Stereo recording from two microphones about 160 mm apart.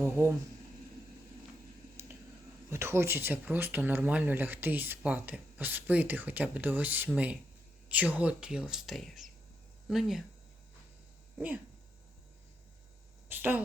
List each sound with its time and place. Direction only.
2.6 s speech: 15° right (ahead or behind)
11.3 s speech: 10° right (ahead or behind)
13.2 s speech: 10° right (ahead or behind)